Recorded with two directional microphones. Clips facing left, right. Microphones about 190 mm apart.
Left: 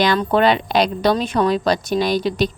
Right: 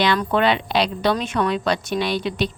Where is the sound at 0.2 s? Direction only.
35° left (ahead or behind).